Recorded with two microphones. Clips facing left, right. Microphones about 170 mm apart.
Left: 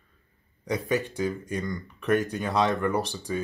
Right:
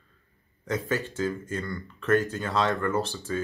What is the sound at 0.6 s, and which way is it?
Speech, 15° left (ahead or behind).